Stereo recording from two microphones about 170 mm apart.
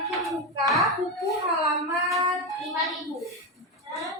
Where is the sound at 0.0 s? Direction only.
Centre (ahead or behind).